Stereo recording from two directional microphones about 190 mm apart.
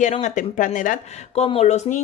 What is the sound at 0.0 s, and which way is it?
A woman's voice, 40° left (ahead or behind).